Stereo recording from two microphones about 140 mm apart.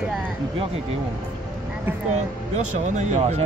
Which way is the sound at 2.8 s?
60° right (ahead or behind).